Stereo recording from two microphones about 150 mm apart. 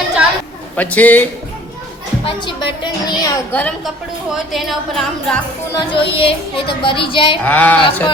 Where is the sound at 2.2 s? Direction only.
35° left (ahead or behind).